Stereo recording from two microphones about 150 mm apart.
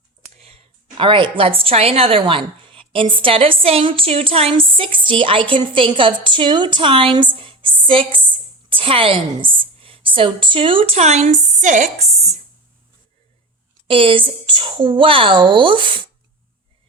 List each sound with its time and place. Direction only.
0.3 s a woman's voice: 40° right (ahead or behind)
7.3 s a sound: 35° right (ahead or behind)
8.7 s a woman's voice: 40° right (ahead or behind)
13.8 s a woman's voice: 35° right (ahead or behind)